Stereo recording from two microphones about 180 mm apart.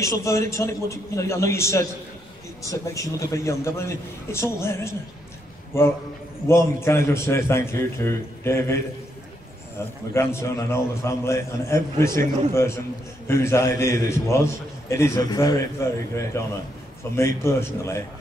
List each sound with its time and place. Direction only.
0.0 s a man's voice: 15° left (ahead or behind)
10.1 s a man's voice: 15° left (ahead or behind)